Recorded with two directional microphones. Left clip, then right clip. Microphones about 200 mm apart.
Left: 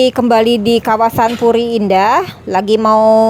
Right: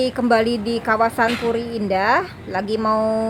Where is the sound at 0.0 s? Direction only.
35° left (ahead or behind).